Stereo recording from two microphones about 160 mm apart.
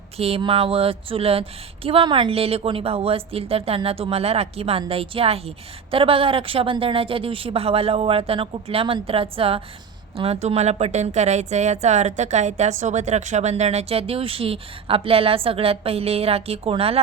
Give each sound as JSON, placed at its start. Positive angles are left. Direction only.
{"t": 0.2, "sound": "speech", "side_deg": -35}